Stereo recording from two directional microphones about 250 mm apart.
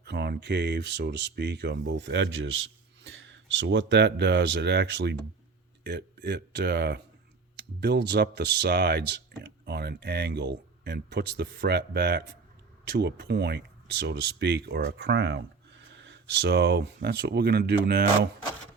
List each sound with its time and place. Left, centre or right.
0.0 s speech: right